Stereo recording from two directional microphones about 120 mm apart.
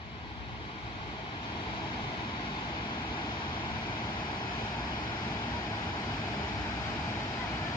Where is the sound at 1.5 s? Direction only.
45° left (ahead or behind).